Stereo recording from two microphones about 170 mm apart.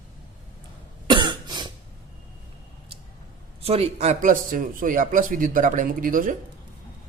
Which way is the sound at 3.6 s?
35° right (ahead or behind).